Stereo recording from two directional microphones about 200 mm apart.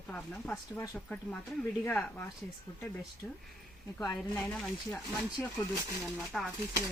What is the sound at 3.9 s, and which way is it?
Speech, 15° left (ahead or behind).